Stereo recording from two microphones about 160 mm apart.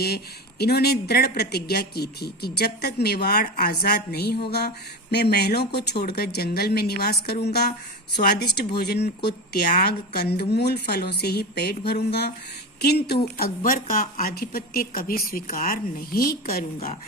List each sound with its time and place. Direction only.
0.6 s speech: 85° left
13.3 s a woman's voice: 70° left (ahead or behind)